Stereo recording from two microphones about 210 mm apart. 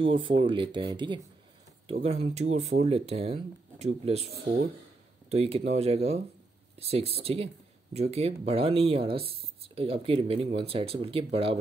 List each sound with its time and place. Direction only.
0.0 s speech: 25° right (ahead or behind)
5.3 s speech: 30° right (ahead or behind)